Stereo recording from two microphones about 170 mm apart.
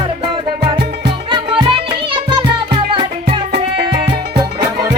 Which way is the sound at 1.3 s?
30° right (ahead or behind).